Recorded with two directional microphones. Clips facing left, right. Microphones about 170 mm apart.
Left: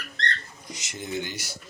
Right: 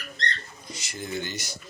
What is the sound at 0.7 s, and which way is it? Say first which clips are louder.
Speech: left 1 dB; 20° left (ahead or behind).